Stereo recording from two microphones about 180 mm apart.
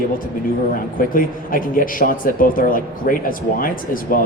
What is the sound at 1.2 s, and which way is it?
Speech, 50° left (ahead or behind).